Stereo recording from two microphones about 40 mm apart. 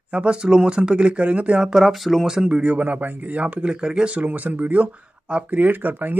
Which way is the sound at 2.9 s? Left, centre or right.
Right.